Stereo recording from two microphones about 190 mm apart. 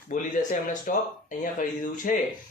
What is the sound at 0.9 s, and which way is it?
A man's voice, 45° left (ahead or behind).